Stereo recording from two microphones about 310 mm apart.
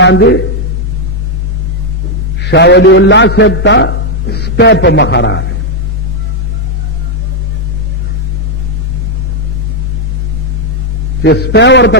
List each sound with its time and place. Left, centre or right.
0.0 s a man's voice: left
2.4 s a man's voice: left
11.2 s a man's voice: left